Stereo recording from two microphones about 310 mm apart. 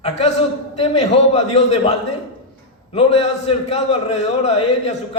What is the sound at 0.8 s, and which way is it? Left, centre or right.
A man's voice, left.